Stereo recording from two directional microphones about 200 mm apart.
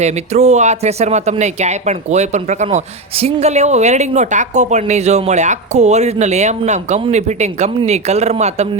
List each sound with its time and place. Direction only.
0.0 s speech: 35° right (ahead or behind)